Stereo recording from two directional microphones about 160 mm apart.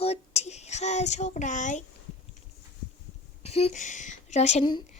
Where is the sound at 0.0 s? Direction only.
40° left (ahead or behind).